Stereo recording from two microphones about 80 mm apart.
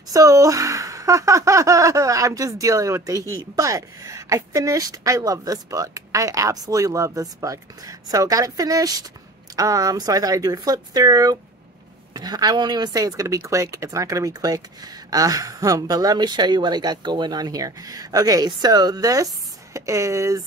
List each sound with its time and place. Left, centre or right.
0.1 s speech: right
19.7 s speech: right